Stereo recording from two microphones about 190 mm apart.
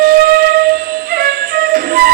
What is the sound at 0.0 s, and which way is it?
Wind instrument, 55° right (ahead or behind).